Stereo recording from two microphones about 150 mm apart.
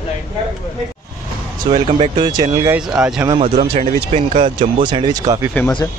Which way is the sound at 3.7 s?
50° right (ahead or behind).